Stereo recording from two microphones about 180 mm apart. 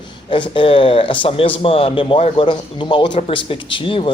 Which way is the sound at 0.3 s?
25° left (ahead or behind).